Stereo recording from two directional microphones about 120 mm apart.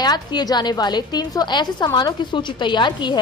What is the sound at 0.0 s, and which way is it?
A woman's voice, 35° left (ahead or behind).